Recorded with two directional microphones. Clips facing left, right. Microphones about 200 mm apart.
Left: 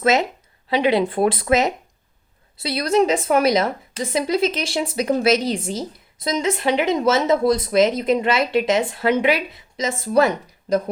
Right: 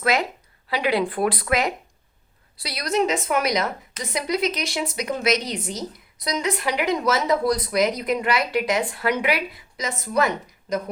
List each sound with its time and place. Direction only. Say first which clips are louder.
0.0 s a woman's voice: left 4 dB; 25° left (ahead or behind)